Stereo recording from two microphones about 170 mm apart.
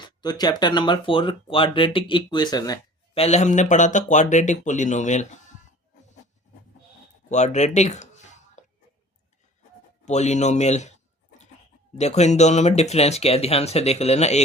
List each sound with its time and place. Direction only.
0.0 s speech: 25° left (ahead or behind)
3.2 s speech: 40° left (ahead or behind)
7.3 s speech: 45° left (ahead or behind)
8.6 s throat clearing: 45° left (ahead or behind)
10.1 s speech: 40° left (ahead or behind)
11.9 s speech: 40° left (ahead or behind)